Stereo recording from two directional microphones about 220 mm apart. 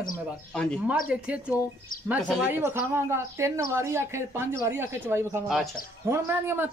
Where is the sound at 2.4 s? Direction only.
10° right (ahead or behind).